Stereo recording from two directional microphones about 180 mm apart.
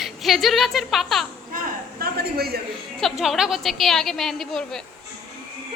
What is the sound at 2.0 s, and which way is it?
Speech, 60° right (ahead or behind).